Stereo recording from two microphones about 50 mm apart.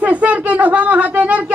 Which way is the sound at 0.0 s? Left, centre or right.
Right.